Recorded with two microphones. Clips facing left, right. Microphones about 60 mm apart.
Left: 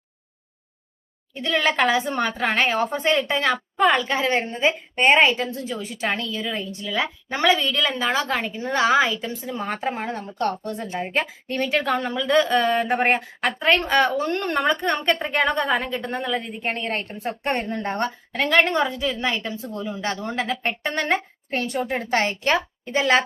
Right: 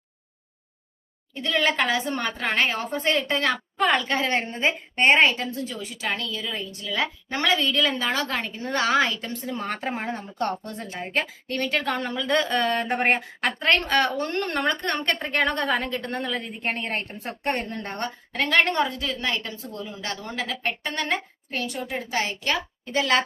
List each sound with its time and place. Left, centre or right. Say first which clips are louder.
1.4 s a woman's voice: left 2 dB; left
3.8 s speech: left 3 dB; centre
5.5 s a woman's voice: left 2 dB; left
6.8 s a woman's voice: left 1 dB; centre
11.0 s a woman's voice: even; centre
17.5 s a woman's voice: left 3 dB; centre
20.0 s a woman's voice: left 5 dB; left